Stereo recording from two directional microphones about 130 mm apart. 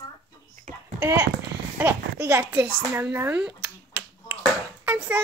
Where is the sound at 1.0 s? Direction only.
20° right (ahead or behind).